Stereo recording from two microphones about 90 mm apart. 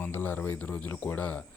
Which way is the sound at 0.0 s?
20° left (ahead or behind).